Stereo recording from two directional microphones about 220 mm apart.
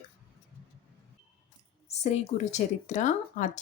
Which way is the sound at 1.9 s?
30° left (ahead or behind).